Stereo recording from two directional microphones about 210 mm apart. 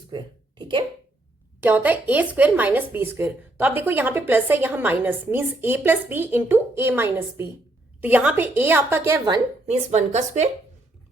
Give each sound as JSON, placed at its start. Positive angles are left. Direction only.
{"t": 0.1, "sound": "a sound", "side_deg": -20}
{"t": 1.6, "sound": "a woman's voice", "side_deg": -10}
{"t": 9.6, "sound": "a woman's voice", "side_deg": -35}